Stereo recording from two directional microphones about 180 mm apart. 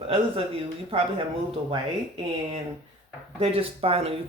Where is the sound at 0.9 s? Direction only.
30° right (ahead or behind).